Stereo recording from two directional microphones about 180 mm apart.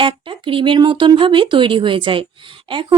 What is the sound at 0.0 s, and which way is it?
Speech, 30° right (ahead or behind).